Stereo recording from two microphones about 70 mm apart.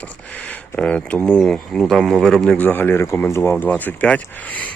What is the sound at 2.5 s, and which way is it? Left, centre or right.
Speech, left.